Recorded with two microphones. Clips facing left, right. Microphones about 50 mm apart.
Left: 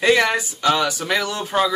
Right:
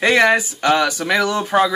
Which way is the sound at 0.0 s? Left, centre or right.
Right.